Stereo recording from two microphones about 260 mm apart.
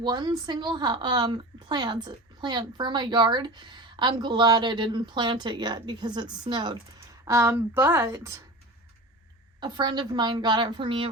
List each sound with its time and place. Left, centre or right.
0.0 s a woman's voice: centre
9.6 s a woman's voice: centre